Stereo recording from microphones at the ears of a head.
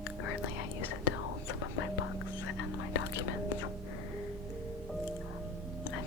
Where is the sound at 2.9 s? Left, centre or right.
Left.